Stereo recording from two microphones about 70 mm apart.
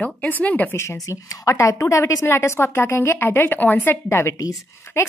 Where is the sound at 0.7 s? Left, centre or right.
Left.